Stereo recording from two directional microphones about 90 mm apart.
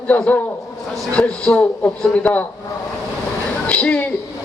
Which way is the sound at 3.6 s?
15° left (ahead or behind).